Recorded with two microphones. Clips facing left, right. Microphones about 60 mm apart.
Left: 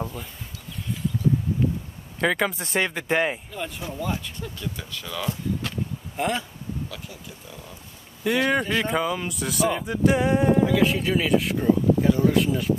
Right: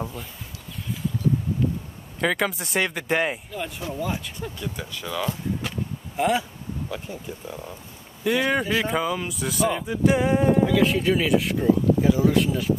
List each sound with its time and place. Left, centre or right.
0.0 s speech: centre
2.2 s speech: centre
4.4 s speech: centre
6.9 s speech: right
8.2 s speech: centre